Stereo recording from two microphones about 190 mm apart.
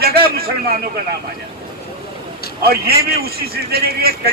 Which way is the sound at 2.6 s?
55° right (ahead or behind).